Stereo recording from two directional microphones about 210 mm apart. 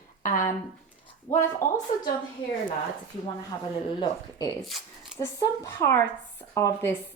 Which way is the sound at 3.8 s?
20° left (ahead or behind).